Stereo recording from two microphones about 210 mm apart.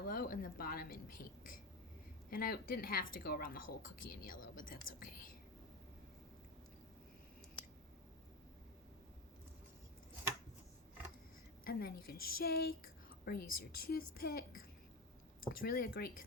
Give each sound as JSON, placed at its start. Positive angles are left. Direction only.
{"t": 0.1, "sound": "a woman's voice", "side_deg": 45}
{"t": 11.6, "sound": "a woman's voice", "side_deg": 45}